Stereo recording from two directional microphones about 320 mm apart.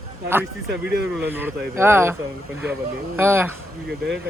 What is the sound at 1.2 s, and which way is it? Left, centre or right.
Speech, centre.